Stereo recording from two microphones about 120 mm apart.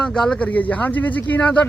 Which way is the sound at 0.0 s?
10° left (ahead or behind).